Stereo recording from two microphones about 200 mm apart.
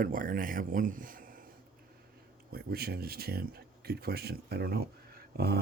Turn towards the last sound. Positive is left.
turn(degrees=-50)  # may be behind; listen again after turning